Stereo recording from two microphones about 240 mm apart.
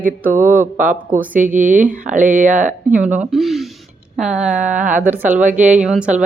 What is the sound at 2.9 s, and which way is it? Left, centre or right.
Speech, centre.